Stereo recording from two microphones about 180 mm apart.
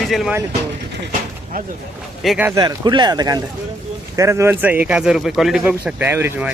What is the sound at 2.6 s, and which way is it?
Speech, 20° right (ahead or behind).